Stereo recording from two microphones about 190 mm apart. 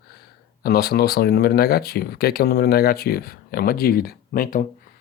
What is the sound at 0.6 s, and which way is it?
Speech, 55° left (ahead or behind).